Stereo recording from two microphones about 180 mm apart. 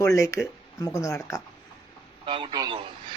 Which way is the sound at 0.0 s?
15° left (ahead or behind).